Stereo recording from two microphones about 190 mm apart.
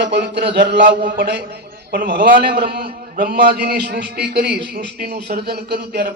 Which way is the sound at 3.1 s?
55° right (ahead or behind).